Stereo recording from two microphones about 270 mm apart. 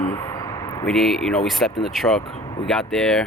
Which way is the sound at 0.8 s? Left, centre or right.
Centre.